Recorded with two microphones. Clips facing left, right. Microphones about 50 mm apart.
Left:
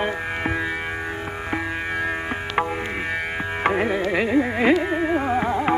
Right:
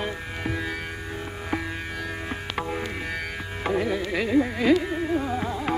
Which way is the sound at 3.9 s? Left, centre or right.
Left.